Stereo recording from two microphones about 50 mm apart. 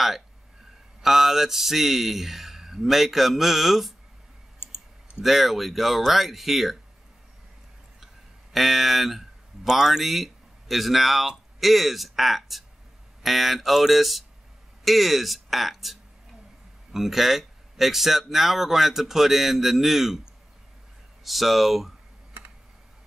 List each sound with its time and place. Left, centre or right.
1.0 s speech: centre
4.6 s clicking: left
5.2 s speech: centre
8.5 s speech: centre
21.2 s speech: centre